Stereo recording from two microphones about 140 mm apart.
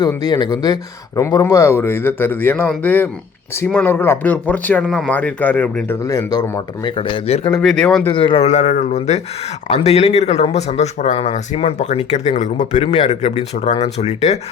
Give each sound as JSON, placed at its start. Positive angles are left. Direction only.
{"t": 0.2, "sound": "speech", "side_deg": 30}
{"t": 6.1, "sound": "speech", "side_deg": 25}
{"t": 6.8, "sound": "speech", "side_deg": 40}
{"t": 7.8, "sound": "speech", "side_deg": 5}
{"t": 8.1, "sound": "speech", "side_deg": 35}
{"t": 8.4, "sound": "speech", "side_deg": 60}